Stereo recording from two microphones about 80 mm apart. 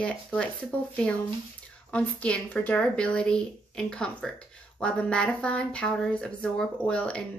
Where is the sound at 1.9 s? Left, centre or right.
Centre.